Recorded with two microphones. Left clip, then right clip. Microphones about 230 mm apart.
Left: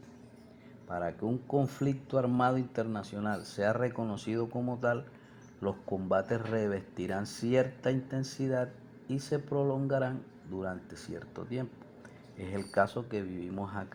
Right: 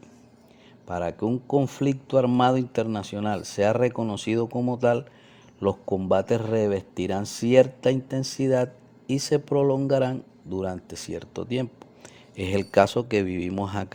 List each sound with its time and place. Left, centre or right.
0.9 s speech: right